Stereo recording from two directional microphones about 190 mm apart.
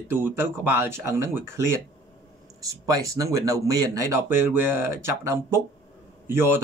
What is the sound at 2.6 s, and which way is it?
Speech, 15° right (ahead or behind).